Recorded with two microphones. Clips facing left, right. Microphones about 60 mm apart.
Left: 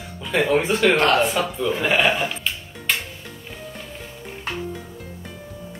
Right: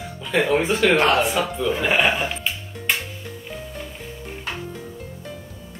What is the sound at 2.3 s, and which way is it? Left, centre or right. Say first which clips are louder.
Music: right 1 dB; centre.